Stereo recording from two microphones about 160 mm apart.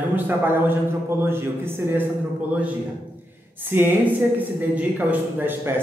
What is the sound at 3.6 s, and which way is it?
A man's voice, 10° right (ahead or behind).